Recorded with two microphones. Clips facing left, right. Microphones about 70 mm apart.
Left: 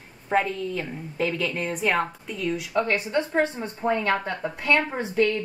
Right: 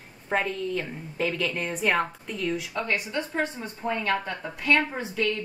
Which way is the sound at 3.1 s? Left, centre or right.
Left.